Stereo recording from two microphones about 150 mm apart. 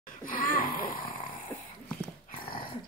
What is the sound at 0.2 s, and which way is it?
Speech, 65° left (ahead or behind).